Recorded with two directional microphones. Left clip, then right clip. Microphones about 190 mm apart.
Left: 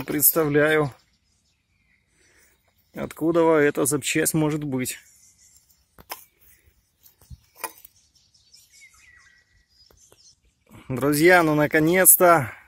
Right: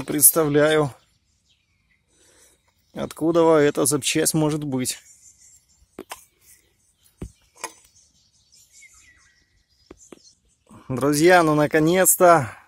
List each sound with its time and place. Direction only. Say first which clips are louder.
0.0 s speech: right 2 dB; 10° right (ahead or behind)
2.9 s speech: right 2 dB; 10° right (ahead or behind)
7.5 s a sound: even; centre (ahead or behind)
9.9 s whispering: right 6 dB; 65° right (ahead or behind)
10.7 s speech: right 1 dB; 10° right (ahead or behind)